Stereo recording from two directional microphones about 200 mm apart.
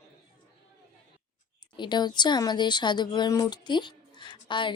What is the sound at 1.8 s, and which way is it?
Speech, 20° left (ahead or behind).